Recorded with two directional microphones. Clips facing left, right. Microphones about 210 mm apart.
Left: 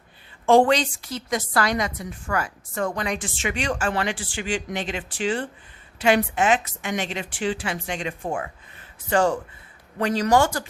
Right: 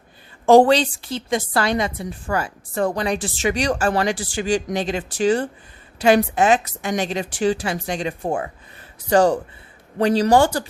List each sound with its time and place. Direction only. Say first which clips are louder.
0.4 s a woman's voice: right 4 dB; 40° right (ahead or behind)